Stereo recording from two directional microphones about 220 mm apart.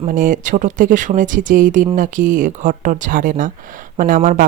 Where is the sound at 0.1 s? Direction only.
35° right (ahead or behind).